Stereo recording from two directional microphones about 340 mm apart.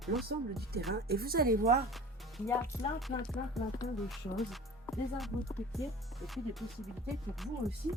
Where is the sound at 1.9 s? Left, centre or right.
Centre.